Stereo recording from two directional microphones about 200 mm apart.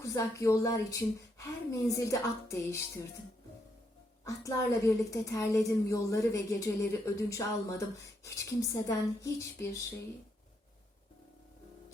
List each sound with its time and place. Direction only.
0.0 s a woman's voice: 15° left (ahead or behind)
4.2 s a woman's voice: 15° left (ahead or behind)